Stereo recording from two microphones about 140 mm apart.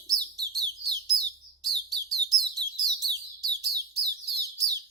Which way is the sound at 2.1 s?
25° right (ahead or behind).